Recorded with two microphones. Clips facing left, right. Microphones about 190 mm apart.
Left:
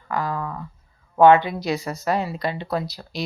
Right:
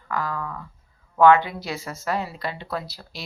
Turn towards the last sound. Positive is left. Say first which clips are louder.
# left 6 dB
turn(degrees=15)  # may be behind; listen again after turning